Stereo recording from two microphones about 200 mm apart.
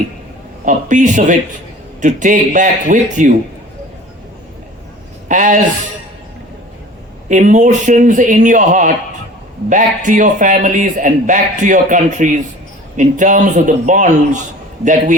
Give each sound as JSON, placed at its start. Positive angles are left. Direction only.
{"t": 0.6, "sound": "a man's voice", "side_deg": -40}
{"t": 5.3, "sound": "a man's voice", "side_deg": -40}
{"t": 7.3, "sound": "a man's voice", "side_deg": -40}